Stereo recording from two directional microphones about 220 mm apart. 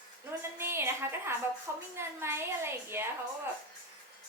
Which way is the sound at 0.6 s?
10° right (ahead or behind).